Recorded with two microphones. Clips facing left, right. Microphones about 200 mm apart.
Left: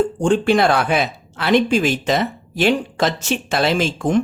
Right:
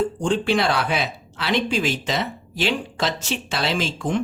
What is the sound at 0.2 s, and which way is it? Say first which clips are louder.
Speech: left 8 dB; 50° left (ahead or behind).